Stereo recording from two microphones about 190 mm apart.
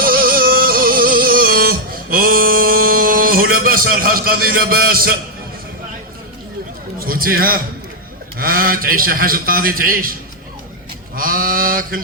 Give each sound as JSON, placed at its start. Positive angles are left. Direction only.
{"t": 0.0, "sound": "music", "side_deg": -50}
{"t": 7.0, "sound": "a man's voice", "side_deg": -50}
{"t": 11.1, "sound": "a sound", "side_deg": -50}